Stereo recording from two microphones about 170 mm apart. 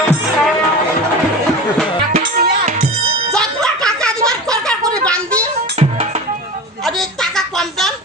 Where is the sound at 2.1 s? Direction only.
45° right (ahead or behind).